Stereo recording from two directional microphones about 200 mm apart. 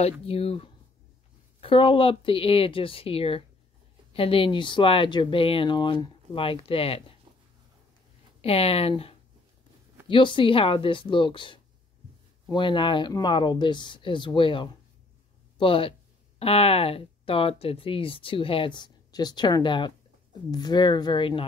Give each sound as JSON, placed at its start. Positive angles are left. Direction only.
{"t": 0.2, "sound": "speech", "side_deg": 30}
{"t": 8.4, "sound": "speech", "side_deg": 30}